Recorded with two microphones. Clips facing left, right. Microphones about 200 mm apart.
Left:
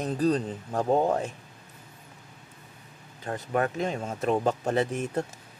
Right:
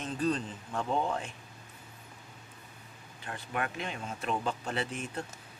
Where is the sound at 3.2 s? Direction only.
40° left (ahead or behind).